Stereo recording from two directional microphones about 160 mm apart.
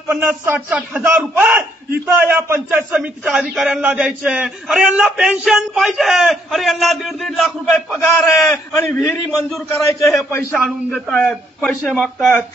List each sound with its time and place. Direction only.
0.1 s a man's voice: 10° right (ahead or behind)
8.7 s a man's voice: 15° left (ahead or behind)
10.9 s a man's voice: 5° left (ahead or behind)
11.9 s a man's voice: 5° right (ahead or behind)